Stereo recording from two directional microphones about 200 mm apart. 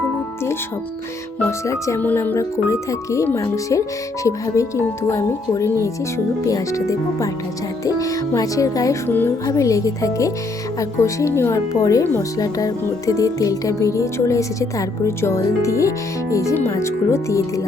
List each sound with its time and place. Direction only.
1.4 s speech: 15° left (ahead or behind)